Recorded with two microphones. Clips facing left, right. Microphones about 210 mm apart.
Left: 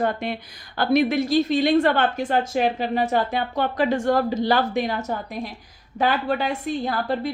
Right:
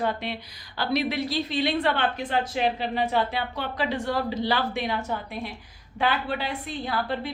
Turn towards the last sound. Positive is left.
turn(degrees=45)  # may be behind; listen again after turning